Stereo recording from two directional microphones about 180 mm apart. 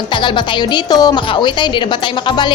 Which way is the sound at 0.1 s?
25° left (ahead or behind).